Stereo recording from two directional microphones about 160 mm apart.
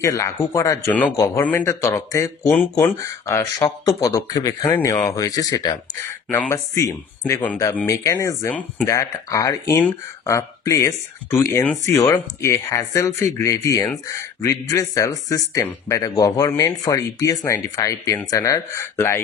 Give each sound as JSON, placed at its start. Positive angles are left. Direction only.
{"t": 0.0, "sound": "speech", "side_deg": 20}
{"t": 0.8, "sound": "speech", "side_deg": 5}
{"t": 1.1, "sound": "speech", "side_deg": 20}